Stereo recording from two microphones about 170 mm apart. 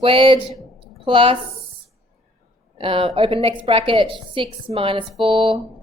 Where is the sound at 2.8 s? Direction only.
30° right (ahead or behind).